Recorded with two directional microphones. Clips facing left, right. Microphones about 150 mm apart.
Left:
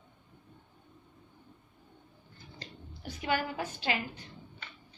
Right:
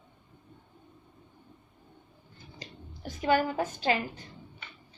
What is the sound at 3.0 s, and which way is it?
Speech, 40° right (ahead or behind).